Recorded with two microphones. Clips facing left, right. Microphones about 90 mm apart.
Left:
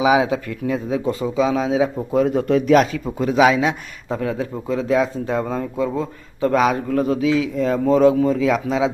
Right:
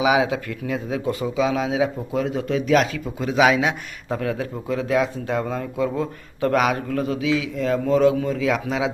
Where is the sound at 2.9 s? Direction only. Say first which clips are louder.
Left 4 dB; 35° left (ahead or behind).